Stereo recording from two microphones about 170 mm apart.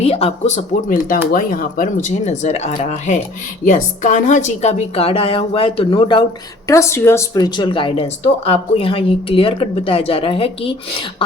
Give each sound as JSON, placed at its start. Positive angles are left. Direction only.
{"t": 0.0, "sound": "speech", "side_deg": 35}
{"t": 6.7, "sound": "speech", "side_deg": 15}